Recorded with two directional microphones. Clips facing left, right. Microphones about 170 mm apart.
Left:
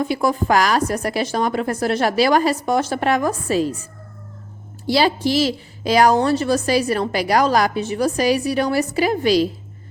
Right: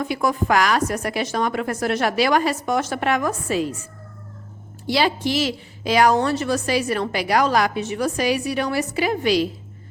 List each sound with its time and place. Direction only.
0.0 s a woman's voice: 30° left (ahead or behind)
4.9 s a woman's voice: 35° left (ahead or behind)